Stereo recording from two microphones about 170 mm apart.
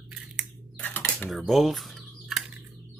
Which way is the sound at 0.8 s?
10° left (ahead or behind).